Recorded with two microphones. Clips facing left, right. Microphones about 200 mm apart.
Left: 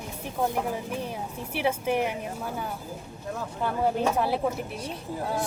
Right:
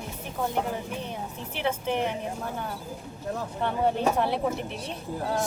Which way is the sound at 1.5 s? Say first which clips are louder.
Left 2 dB; 10° left (ahead or behind).